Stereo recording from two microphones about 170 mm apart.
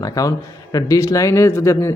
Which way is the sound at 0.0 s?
20° left (ahead or behind).